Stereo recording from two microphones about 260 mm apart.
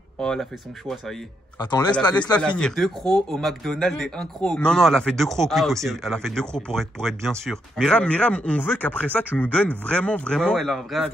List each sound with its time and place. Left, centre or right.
0.2 s speech: centre
1.6 s speech: centre
2.3 s speech: centre